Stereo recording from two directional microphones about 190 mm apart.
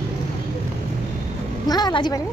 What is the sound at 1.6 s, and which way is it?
Speech, 20° left (ahead or behind).